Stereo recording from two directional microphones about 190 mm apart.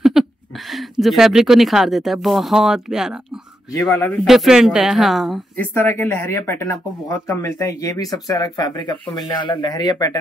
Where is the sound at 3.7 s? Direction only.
10° left (ahead or behind).